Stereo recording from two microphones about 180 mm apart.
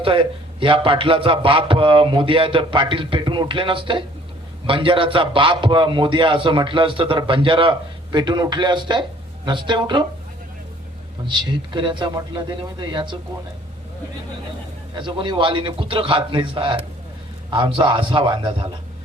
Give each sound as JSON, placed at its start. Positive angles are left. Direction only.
{"t": 0.0, "sound": "a man's voice", "side_deg": -30}
{"t": 11.3, "sound": "a man's voice", "side_deg": -25}
{"t": 14.9, "sound": "a man's voice", "side_deg": -25}